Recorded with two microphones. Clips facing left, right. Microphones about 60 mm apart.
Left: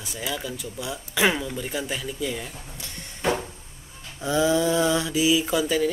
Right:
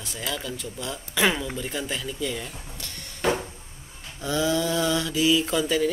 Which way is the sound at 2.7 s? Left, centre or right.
Centre.